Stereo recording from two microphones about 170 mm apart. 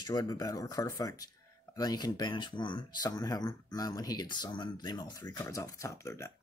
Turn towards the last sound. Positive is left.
turn(degrees=15)  # may be behind; listen again after turning